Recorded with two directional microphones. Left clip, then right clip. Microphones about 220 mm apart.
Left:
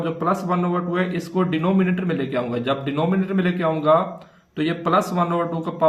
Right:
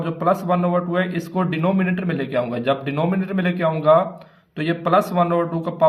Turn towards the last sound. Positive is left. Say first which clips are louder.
# right 2 dB
turn(degrees=-50)  # may be behind; listen again after turning